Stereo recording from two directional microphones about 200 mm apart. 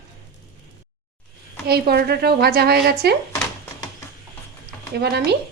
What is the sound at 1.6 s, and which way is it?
A woman's voice, 50° right (ahead or behind).